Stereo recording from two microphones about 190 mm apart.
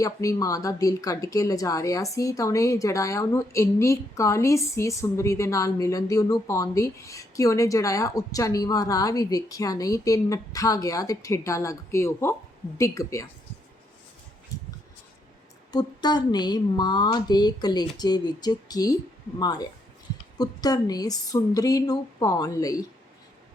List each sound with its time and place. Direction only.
0.0 s a woman's voice: 15° left (ahead or behind)
14.5 s a sound: 20° left (ahead or behind)
15.7 s speech: 20° left (ahead or behind)